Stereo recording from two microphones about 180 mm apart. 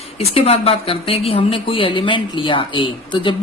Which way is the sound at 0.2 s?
35° left (ahead or behind).